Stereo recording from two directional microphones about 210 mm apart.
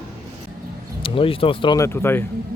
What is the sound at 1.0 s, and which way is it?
Speech, 25° left (ahead or behind).